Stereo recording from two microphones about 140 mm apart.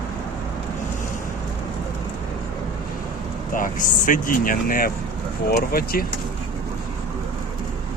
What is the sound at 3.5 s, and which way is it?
Speech, 70° left (ahead or behind).